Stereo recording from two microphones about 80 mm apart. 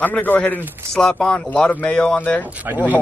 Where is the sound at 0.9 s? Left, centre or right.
Centre.